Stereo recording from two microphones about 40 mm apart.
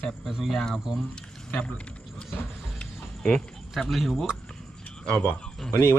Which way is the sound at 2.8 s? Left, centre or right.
Centre.